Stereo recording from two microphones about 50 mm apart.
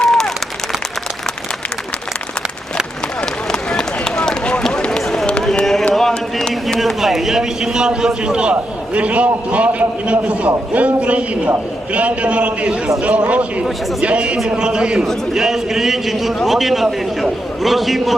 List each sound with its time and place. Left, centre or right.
0.0 s applause: centre
3.5 s run: centre
5.9 s music: centre
6.5 s a man's voice: centre